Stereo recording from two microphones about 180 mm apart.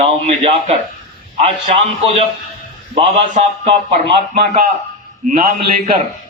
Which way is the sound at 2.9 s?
30° right (ahead or behind).